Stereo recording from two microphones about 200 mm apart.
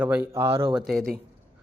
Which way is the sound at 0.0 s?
10° right (ahead or behind).